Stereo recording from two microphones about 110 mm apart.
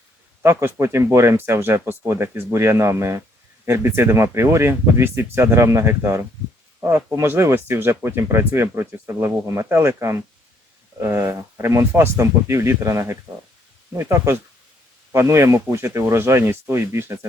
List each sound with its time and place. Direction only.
0.4 s speech: 25° right (ahead or behind)